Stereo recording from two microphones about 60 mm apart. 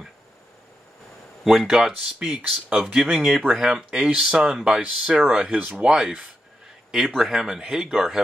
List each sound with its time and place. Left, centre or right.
1.4 s speech: centre